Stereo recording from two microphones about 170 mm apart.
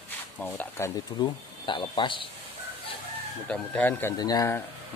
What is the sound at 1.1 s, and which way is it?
Speech, 30° left (ahead or behind).